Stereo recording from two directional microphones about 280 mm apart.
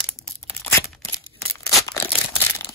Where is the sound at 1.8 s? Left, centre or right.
Centre.